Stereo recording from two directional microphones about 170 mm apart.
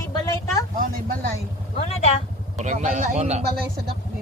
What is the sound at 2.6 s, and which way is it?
Speech, 45° right (ahead or behind).